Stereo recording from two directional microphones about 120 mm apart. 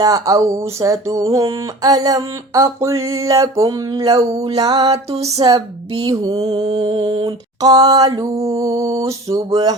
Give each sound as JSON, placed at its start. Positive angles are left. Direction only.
{"t": 0.0, "sound": "speech", "side_deg": -30}
{"t": 4.4, "sound": "mantra", "side_deg": -35}